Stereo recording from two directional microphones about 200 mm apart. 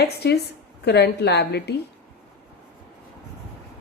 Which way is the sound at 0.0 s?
50° left (ahead or behind).